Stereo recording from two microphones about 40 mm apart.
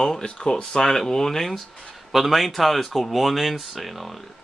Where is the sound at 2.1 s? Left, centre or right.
Centre.